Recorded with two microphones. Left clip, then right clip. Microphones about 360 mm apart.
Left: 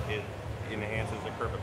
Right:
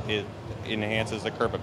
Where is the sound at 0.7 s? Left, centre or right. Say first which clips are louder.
Right 7 dB; right.